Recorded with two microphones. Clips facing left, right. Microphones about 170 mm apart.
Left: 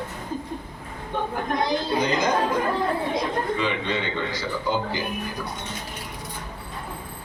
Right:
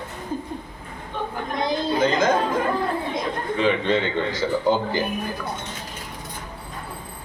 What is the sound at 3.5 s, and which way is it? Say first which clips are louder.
A man's voice: right 5 dB; 50° right (ahead or behind).